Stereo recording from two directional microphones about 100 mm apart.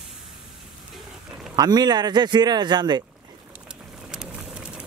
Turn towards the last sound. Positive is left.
turn(degrees=-45)  # may be behind; listen again after turning